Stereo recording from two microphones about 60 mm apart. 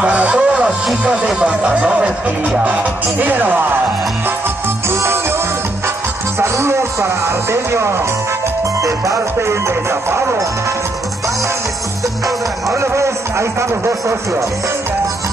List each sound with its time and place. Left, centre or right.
0.0 s music: right
1.0 s speech: centre; by 3.6 s right
4.8 s music: right
6.4 s speech: right
8.8 s speech: right
12.7 s speech: right